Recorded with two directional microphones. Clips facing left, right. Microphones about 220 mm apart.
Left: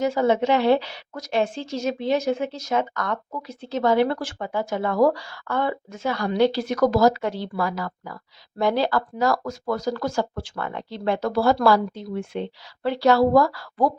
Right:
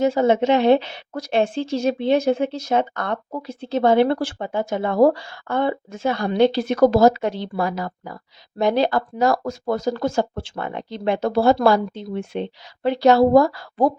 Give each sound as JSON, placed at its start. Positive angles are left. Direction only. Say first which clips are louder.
{"t": 0.0, "sound": "a woman's voice", "louder": "right 3 dB", "side_deg": -25}